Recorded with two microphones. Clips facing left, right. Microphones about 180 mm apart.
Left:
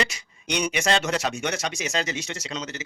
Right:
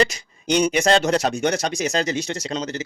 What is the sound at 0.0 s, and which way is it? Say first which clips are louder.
Speech: right 8 dB; 35° right (ahead or behind).